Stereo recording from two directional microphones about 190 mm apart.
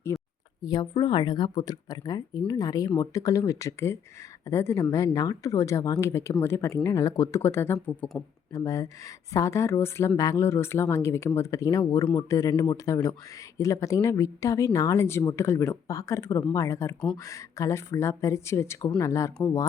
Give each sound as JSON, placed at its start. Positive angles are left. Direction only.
{"t": 0.1, "sound": "a sound", "side_deg": 15}
{"t": 0.6, "sound": "speech", "side_deg": 20}
{"t": 8.5, "sound": "speech", "side_deg": 15}